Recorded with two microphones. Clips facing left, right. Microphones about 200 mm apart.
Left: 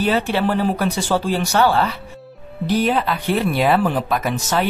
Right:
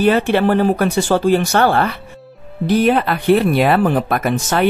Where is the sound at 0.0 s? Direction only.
55° right (ahead or behind).